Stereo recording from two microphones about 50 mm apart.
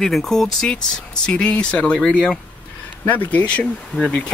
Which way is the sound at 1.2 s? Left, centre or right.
Centre.